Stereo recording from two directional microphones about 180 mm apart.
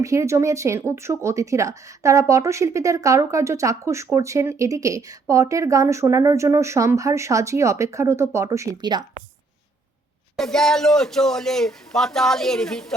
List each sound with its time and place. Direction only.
0.0 s speech: 15° right (ahead or behind)
10.3 s speech: 5° left (ahead or behind)